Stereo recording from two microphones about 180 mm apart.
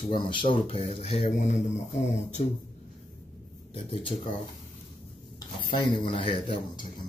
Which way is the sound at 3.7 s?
30° left (ahead or behind).